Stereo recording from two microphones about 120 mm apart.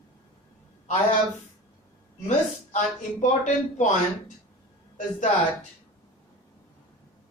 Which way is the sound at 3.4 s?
90° left.